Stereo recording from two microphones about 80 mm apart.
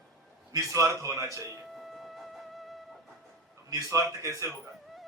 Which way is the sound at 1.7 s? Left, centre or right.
Centre.